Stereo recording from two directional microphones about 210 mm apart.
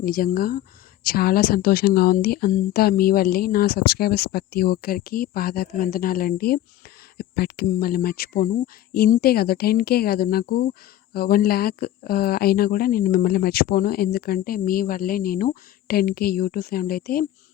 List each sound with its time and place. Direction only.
0.0 s speech: 45° left (ahead or behind)